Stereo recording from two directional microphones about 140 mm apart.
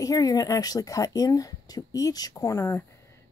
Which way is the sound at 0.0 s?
25° left (ahead or behind).